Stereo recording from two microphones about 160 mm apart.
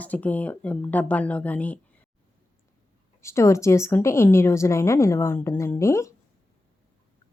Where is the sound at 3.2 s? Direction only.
15° left (ahead or behind).